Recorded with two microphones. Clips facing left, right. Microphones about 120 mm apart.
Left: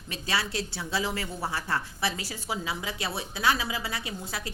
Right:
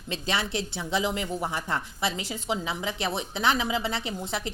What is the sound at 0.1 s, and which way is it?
A woman's voice, 20° right (ahead or behind).